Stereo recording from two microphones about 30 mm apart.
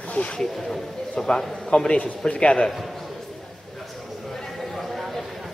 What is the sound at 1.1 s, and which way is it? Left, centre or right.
A man's voice, left.